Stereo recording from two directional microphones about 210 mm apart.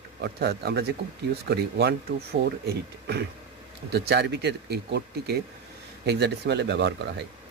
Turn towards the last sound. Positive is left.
turn(degrees=-55)  # may be behind; listen again after turning